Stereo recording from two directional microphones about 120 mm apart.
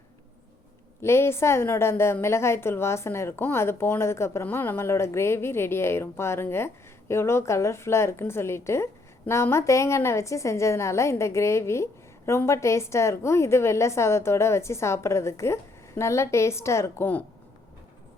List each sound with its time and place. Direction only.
1.0 s a woman's voice: 20° left (ahead or behind)